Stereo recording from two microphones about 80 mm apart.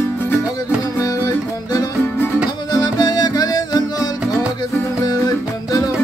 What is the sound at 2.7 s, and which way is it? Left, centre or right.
Music, left.